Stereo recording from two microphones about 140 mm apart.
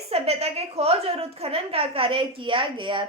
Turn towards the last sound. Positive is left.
turn(degrees=-35)  # may be behind; listen again after turning